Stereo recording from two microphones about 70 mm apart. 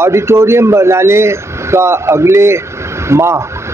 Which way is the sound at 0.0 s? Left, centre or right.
Right.